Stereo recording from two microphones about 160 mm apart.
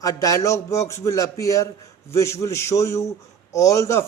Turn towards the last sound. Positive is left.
turn(degrees=20)  # may be behind; listen again after turning